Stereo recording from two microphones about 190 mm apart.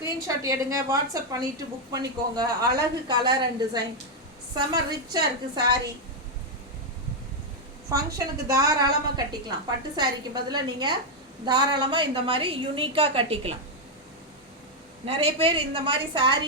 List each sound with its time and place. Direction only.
0.0 s a woman's voice: 15° right (ahead or behind)
7.9 s a woman's voice: 15° right (ahead or behind)
15.0 s a woman's voice: 30° right (ahead or behind)